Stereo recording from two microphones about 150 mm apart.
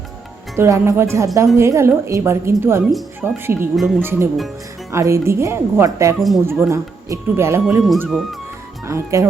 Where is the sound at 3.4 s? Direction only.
15° right (ahead or behind).